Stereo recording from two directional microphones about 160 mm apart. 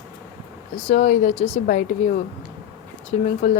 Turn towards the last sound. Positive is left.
turn(degrees=45)  # may be behind; listen again after turning